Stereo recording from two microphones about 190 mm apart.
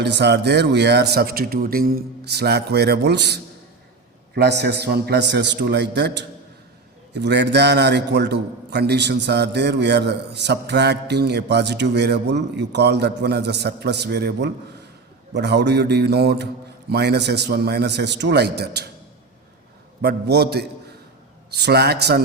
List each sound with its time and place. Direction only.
0.0 s a man's voice: 65° right (ahead or behind)
20.0 s a man's voice: 60° right (ahead or behind)